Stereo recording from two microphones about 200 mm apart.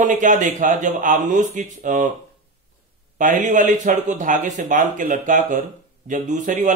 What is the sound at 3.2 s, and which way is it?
Speech, 40° right (ahead or behind).